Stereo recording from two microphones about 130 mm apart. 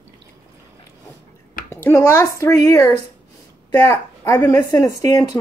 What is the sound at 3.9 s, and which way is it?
Speech, 25° left (ahead or behind).